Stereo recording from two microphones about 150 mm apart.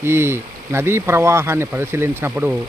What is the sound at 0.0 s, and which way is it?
Speech, 15° right (ahead or behind).